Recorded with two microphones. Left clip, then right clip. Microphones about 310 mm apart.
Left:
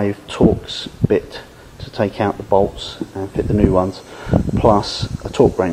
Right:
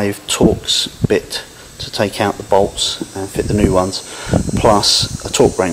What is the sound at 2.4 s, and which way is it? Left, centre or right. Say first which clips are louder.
Speech: right 3 dB; left.